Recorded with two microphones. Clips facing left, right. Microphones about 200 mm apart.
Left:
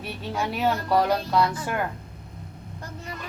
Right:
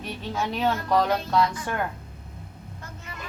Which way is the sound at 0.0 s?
10° left (ahead or behind).